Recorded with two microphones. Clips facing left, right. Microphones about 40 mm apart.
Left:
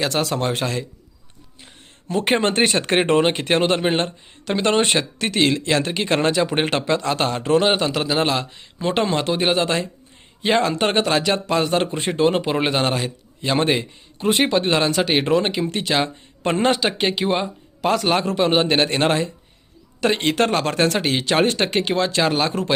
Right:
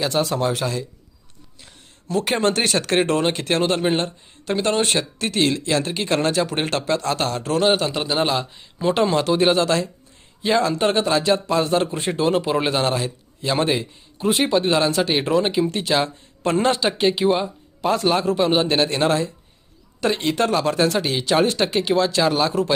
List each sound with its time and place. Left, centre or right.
0.0 s speech: left
1.6 s speech: left
7.9 s a man's voice: left
8.3 s speech: left
8.8 s speech: left
9.4 s speech: left
10.4 s speech: left
16.8 s speech: left